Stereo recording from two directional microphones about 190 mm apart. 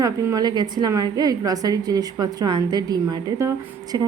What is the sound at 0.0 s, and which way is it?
A woman's voice, 20° right (ahead or behind).